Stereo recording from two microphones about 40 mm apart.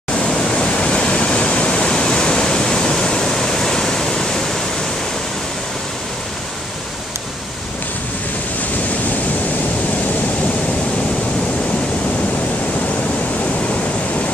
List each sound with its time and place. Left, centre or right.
0.3 s pink noise: left
0.7 s waterfall: left